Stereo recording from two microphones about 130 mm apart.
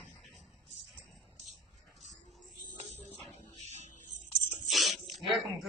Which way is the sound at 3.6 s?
60° left (ahead or behind).